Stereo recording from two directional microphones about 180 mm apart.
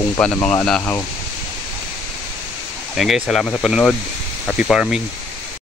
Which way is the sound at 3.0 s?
Centre (ahead or behind).